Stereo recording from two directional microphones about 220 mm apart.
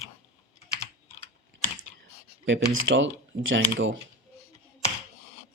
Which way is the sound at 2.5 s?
55° right (ahead or behind).